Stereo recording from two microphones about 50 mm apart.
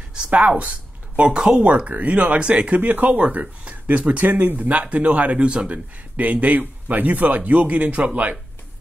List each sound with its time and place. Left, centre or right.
0.3 s speech: right
1.3 s speech: centre
2.8 s speech: right